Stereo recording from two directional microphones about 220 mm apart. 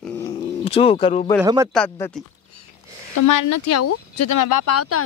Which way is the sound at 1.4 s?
15° right (ahead or behind).